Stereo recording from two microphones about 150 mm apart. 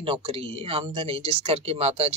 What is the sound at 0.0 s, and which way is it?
Speech, 40° right (ahead or behind).